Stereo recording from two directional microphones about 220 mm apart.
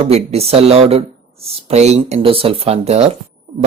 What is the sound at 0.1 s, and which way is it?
Speech, 30° right (ahead or behind).